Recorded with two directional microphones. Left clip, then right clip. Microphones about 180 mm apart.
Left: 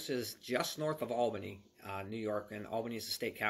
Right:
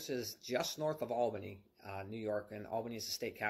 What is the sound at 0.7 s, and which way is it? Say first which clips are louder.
Speech: left 1 dB; 20° left (ahead or behind).